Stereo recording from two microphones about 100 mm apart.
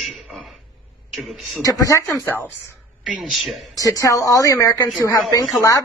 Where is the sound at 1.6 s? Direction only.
35° left (ahead or behind).